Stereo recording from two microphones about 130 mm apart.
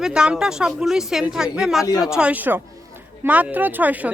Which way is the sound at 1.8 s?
25° left (ahead or behind).